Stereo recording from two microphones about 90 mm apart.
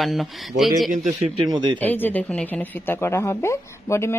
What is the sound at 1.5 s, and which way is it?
Speech, 55° right (ahead or behind).